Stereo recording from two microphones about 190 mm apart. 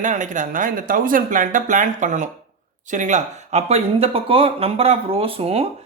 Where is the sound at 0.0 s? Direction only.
40° right (ahead or behind).